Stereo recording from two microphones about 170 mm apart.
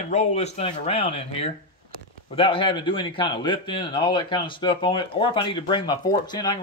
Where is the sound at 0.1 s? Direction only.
40° left (ahead or behind).